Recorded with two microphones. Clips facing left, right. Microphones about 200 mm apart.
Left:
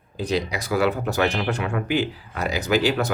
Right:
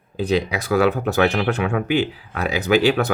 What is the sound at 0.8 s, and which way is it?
Speech, 65° right (ahead or behind).